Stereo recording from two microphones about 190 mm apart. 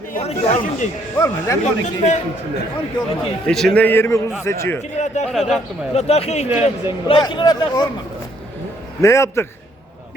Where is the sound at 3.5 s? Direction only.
5° left (ahead or behind).